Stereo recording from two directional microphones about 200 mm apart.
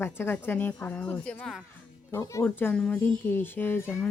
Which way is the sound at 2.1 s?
15° left (ahead or behind).